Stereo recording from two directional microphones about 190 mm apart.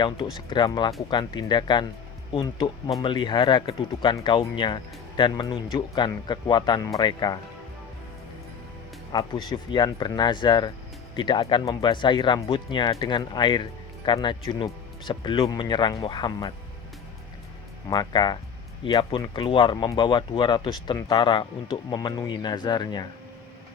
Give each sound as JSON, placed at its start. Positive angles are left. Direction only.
{"t": 0.3, "sound": "speech", "side_deg": 25}
{"t": 9.1, "sound": "speech", "side_deg": 20}
{"t": 17.8, "sound": "speech", "side_deg": 20}